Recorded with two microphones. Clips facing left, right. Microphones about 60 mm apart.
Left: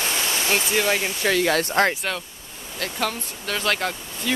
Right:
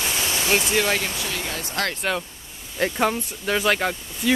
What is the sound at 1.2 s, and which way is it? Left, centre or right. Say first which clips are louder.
Speech: left 9 dB; left.